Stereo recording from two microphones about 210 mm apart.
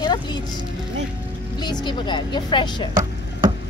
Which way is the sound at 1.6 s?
20° left (ahead or behind).